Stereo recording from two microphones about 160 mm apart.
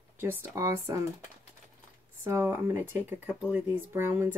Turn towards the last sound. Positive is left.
turn(degrees=-15)  # may be behind; listen again after turning